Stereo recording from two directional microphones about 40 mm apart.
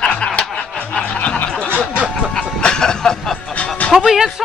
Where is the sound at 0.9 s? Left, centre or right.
Left.